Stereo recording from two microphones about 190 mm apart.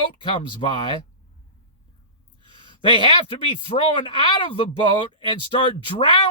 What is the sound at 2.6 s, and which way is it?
Speech, 25° left (ahead or behind).